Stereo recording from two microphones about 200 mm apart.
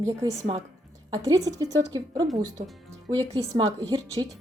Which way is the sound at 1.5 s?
20° right (ahead or behind).